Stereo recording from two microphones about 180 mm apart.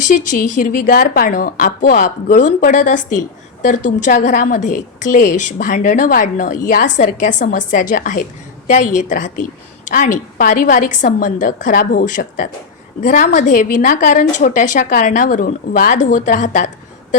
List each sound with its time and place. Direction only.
0.1 s a woman's voice: 45° left (ahead or behind)